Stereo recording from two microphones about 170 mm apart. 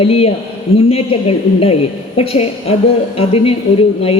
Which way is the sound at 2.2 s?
35° left (ahead or behind).